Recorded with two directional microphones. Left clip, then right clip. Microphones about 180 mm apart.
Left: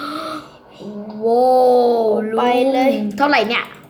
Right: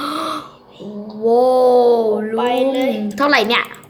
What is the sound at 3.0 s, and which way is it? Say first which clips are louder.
Speech: right 1 dB; 10° right (ahead or behind).